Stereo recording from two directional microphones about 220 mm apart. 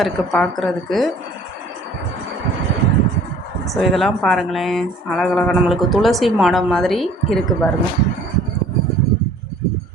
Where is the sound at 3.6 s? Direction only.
Centre (ahead or behind).